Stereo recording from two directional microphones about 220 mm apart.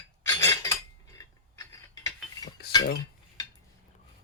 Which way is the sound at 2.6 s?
45° left (ahead or behind).